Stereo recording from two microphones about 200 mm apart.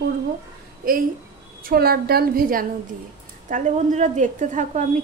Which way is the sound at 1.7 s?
50° right (ahead or behind).